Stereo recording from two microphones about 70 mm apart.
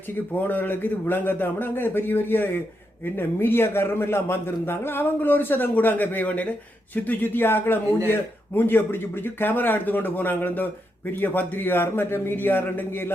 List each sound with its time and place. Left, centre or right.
0.3 s a man's voice: left